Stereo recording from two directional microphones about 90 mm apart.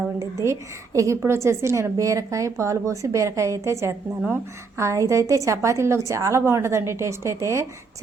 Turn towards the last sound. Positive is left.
turn(degrees=-35)  # may be behind; listen again after turning